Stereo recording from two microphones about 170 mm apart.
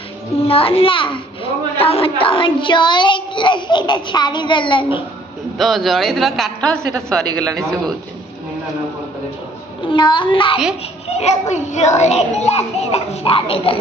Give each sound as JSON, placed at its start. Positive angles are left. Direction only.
{"t": 0.4, "sound": "a child's voice", "side_deg": 35}
{"t": 5.6, "sound": "a man's voice", "side_deg": 0}
{"t": 9.8, "sound": "a child's voice", "side_deg": 30}
{"t": 11.1, "sound": "a child's voice", "side_deg": 40}